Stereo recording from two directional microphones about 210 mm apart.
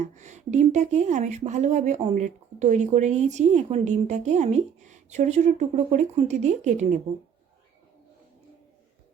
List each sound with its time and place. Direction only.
0.0 s speech: 35° right (ahead or behind)